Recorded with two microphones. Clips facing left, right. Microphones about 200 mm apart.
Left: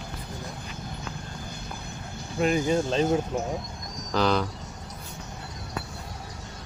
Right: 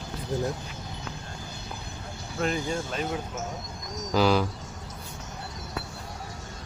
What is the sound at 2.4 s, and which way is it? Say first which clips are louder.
Speech: left 5 dB; 15° left (ahead or behind).